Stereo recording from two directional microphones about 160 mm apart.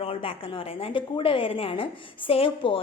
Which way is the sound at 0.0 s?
35° left (ahead or behind).